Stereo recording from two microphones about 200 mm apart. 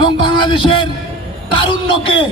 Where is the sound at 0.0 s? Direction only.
25° left (ahead or behind).